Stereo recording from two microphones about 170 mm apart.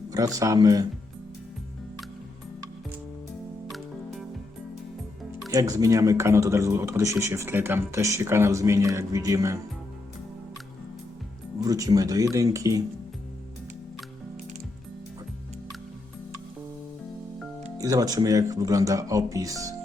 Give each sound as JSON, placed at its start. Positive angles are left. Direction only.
{"t": 0.1, "sound": "speech", "side_deg": -20}
{"t": 5.5, "sound": "speech", "side_deg": -20}
{"t": 11.6, "sound": "speech", "side_deg": -20}
{"t": 17.7, "sound": "speech", "side_deg": -20}